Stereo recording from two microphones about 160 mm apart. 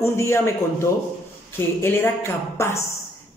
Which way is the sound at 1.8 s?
15° left (ahead or behind).